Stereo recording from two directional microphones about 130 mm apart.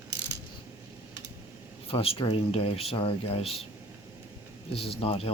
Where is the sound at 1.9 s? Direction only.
45° left (ahead or behind).